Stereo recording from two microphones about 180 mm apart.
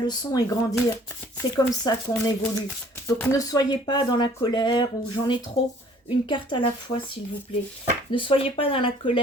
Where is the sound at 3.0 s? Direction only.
15° left (ahead or behind).